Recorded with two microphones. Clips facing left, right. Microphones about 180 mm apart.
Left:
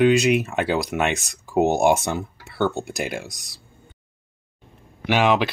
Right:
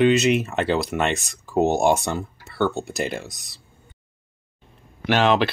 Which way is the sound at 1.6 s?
15° left (ahead or behind).